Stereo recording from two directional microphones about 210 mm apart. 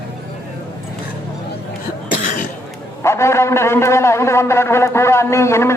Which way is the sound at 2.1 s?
40° left (ahead or behind).